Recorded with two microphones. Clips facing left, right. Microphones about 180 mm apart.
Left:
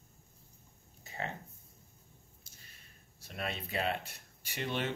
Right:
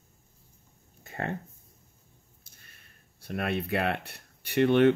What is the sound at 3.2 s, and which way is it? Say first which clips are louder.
Speech: right 9 dB; 60° right (ahead or behind).